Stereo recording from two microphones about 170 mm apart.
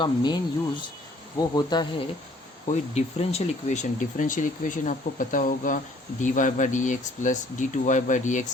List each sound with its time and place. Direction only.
0.0 s insect: 25° left (ahead or behind)
2.6 s speech: 40° left (ahead or behind)